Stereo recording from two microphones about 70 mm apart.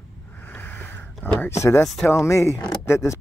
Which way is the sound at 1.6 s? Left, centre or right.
Left.